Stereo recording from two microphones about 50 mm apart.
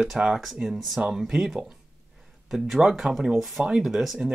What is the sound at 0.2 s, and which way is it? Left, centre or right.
Speech, centre.